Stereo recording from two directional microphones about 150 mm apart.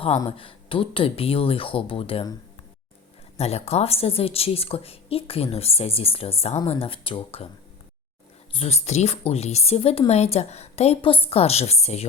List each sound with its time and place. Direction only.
0.3 s a woman's voice: 35° left (ahead or behind)
3.3 s a woman's voice: 45° left (ahead or behind)
8.5 s a woman's voice: 45° left (ahead or behind)